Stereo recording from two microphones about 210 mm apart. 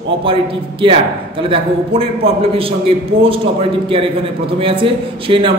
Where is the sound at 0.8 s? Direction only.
25° right (ahead or behind).